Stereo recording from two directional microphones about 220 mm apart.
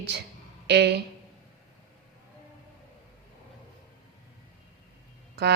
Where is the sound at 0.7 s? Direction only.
50° right (ahead or behind).